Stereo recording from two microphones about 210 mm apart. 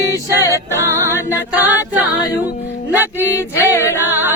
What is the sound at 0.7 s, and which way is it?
Speech, 15° right (ahead or behind).